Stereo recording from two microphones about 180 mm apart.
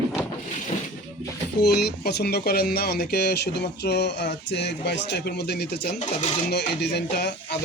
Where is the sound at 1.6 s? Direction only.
65° left (ahead or behind).